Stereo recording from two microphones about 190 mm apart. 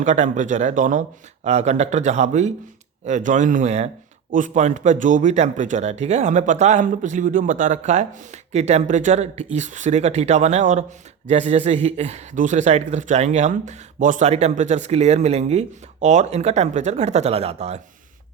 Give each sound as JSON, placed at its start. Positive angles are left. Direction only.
{"t": 0.0, "sound": "speech", "side_deg": -40}